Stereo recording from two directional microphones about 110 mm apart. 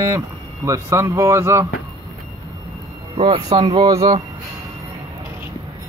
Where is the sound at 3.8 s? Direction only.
35° right (ahead or behind).